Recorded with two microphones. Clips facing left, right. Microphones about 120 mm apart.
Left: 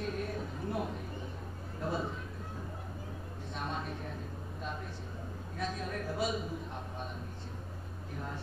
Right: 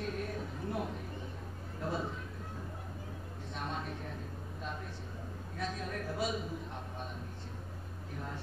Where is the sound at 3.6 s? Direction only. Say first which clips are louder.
Left 1 dB; 20° left (ahead or behind).